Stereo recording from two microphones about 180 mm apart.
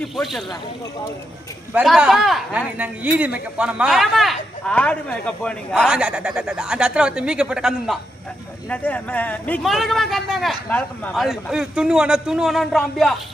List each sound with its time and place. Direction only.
0.2 s speech: centre (ahead or behind)
1.7 s speech: 5° right (ahead or behind)
8.7 s speech: 10° left (ahead or behind)